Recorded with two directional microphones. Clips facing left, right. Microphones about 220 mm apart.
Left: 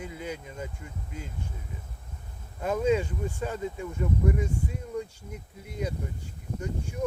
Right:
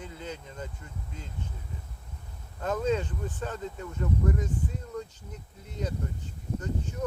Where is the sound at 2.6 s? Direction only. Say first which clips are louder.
Left 3 dB; 10° left (ahead or behind).